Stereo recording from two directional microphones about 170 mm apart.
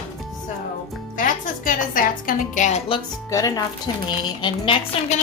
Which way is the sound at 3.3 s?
20° left (ahead or behind).